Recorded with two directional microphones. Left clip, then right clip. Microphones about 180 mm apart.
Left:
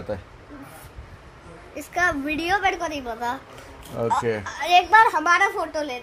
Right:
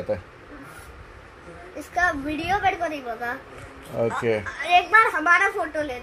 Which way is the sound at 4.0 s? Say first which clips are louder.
Right 2 dB; 20° right (ahead or behind).